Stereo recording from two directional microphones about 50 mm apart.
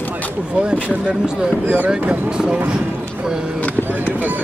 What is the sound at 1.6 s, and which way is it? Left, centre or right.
Speech, right.